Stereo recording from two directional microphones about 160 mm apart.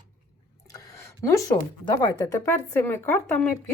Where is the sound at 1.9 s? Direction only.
20° left (ahead or behind).